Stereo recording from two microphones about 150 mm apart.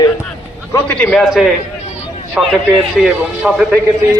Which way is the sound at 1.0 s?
Centre (ahead or behind).